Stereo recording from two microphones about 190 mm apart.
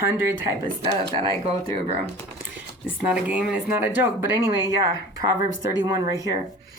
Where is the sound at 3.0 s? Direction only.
5° right (ahead or behind).